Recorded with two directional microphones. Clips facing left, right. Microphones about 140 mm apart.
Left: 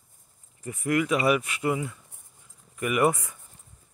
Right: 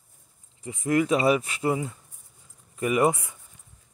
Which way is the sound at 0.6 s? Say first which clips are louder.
Even; 20° right (ahead or behind).